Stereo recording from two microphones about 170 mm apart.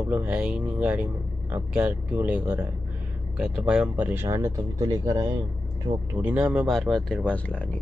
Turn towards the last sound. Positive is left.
turn(degrees=10)  # may be behind; listen again after turning